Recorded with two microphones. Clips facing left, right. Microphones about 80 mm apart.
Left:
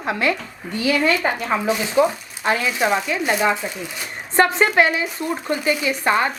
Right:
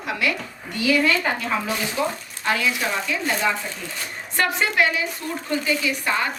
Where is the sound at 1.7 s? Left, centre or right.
Centre.